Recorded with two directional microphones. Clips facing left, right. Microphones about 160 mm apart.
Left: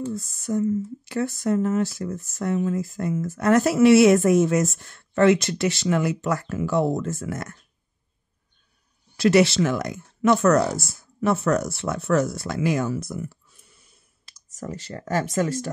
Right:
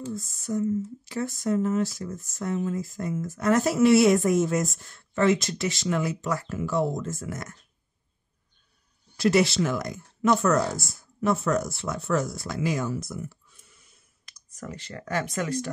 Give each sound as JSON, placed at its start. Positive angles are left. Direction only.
{"t": 0.0, "sound": "speech", "side_deg": 65}
{"t": 9.1, "sound": "speech", "side_deg": 75}
{"t": 14.2, "sound": "speech", "side_deg": 35}